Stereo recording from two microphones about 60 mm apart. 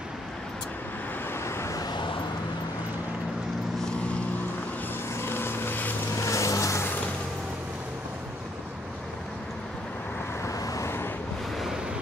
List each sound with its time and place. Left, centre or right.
1.3 s vehicle: left
5.1 s vehicle: left
6.1 s vehicle: left
10.4 s vehicle: left
11.5 s waves: centre